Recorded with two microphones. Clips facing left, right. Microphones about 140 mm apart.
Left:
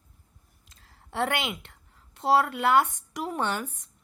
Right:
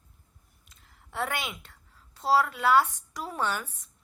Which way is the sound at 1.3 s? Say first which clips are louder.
Left 4 dB; 25° left (ahead or behind).